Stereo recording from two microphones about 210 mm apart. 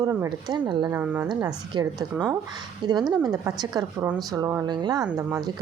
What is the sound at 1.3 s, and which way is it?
A woman's voice, 20° right (ahead or behind).